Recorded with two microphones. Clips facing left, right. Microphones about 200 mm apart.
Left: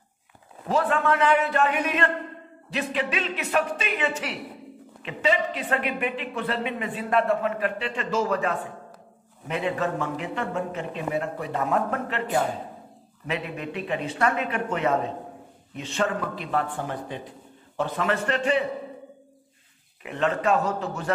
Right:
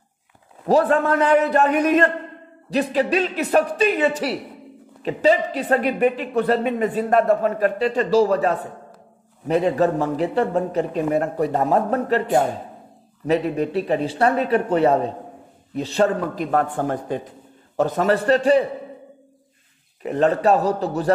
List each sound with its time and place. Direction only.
0.7 s a man's voice: 40° right (ahead or behind)
20.0 s speech: 40° right (ahead or behind)